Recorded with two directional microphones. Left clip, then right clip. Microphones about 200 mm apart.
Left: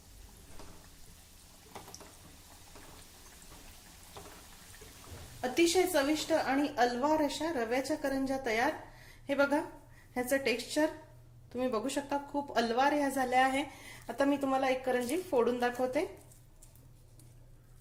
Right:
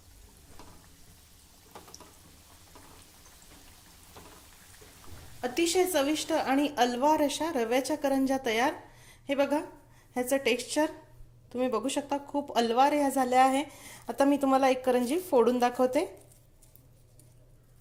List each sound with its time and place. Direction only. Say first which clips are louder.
5.4 s a woman's voice: right 1 dB; 25° right (ahead or behind)
9.2 s a woman's voice: right 2 dB; 25° right (ahead or behind)